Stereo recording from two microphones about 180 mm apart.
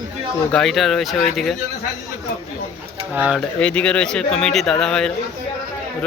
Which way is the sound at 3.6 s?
5° left (ahead or behind).